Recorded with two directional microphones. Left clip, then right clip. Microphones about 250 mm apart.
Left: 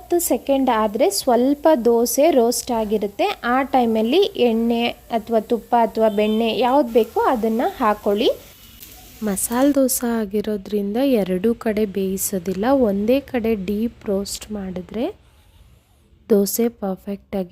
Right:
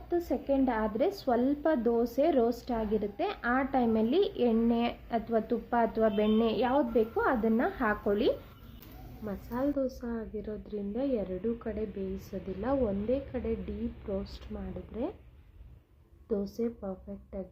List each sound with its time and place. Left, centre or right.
0.1 s a woman's voice: left
9.2 s a woman's voice: left
16.2 s a woman's voice: left